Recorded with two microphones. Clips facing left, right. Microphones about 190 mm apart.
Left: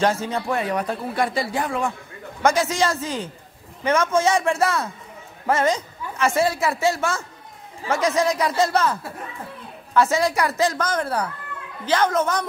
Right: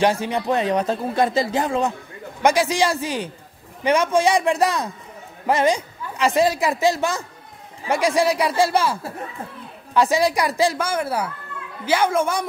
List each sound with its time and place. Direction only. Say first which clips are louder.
0.0 s a man's voice: right 2 dB; 15° right (ahead or behind)
9.9 s a man's voice: right 1 dB; 15° right (ahead or behind)